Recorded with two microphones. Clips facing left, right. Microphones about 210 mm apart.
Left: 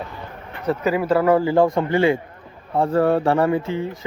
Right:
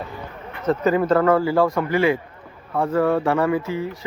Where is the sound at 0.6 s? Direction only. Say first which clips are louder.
Right 2 dB; 10° left (ahead or behind).